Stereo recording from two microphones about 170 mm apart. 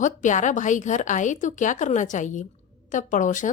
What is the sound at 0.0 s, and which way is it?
A woman's voice, 50° left (ahead or behind).